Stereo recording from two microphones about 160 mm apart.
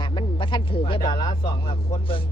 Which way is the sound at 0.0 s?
30° left (ahead or behind).